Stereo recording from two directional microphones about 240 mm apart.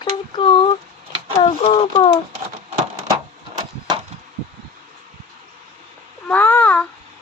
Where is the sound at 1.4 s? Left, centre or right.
Centre.